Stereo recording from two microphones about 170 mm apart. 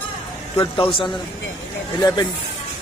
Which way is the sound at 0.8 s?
30° left (ahead or behind).